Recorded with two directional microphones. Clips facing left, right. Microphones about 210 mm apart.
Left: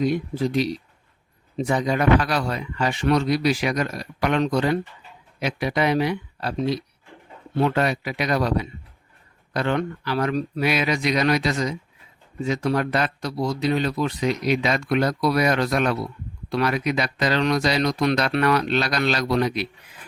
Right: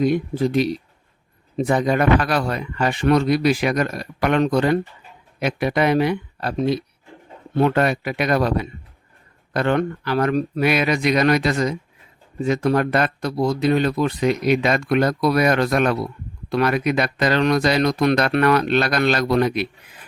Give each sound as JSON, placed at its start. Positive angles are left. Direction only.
{"t": 0.0, "sound": "speech", "side_deg": -55}